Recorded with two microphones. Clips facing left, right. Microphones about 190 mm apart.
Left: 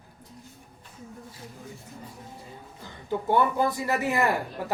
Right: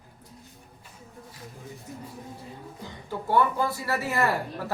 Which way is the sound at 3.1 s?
20° left (ahead or behind).